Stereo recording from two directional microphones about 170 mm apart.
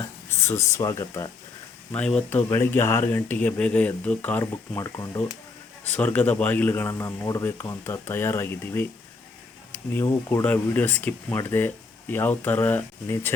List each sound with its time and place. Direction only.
0.3 s speech: 15° left (ahead or behind)
1.9 s speech: 5° left (ahead or behind)
9.9 s speech: 15° left (ahead or behind)